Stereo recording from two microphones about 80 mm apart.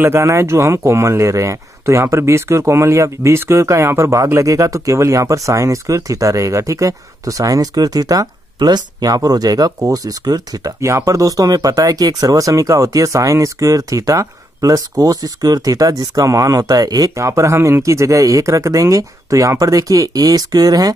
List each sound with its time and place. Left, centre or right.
0.0 s speech: right
10.8 s speech: right